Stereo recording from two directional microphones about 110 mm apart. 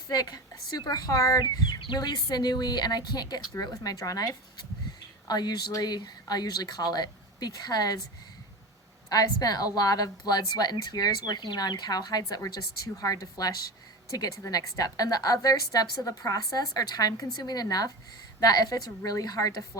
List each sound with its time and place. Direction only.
0.1 s a woman's voice: 35° left (ahead or behind)
9.0 s a woman's voice: 35° left (ahead or behind)